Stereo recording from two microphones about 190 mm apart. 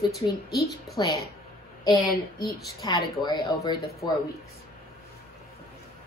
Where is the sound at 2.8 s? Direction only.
20° left (ahead or behind).